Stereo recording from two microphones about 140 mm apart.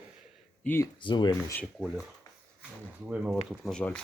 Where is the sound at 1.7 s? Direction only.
5° right (ahead or behind).